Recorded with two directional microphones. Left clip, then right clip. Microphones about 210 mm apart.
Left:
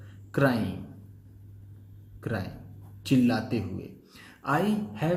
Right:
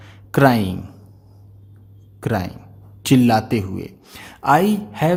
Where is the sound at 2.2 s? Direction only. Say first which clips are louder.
Right 11 dB; 55° right (ahead or behind).